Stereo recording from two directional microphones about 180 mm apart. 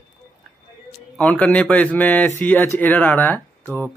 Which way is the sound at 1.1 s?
5° left (ahead or behind).